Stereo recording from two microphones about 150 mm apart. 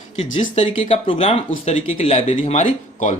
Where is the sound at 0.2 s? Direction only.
40° left (ahead or behind).